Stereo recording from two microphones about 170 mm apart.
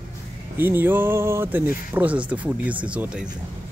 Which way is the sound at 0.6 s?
10° right (ahead or behind).